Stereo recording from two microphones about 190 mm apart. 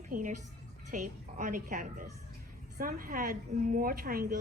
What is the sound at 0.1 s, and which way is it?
A woman's voice, 45° right (ahead or behind).